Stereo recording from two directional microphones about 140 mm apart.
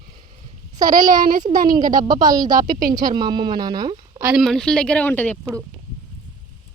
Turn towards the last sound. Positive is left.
turn(degrees=10)  # may be behind; listen again after turning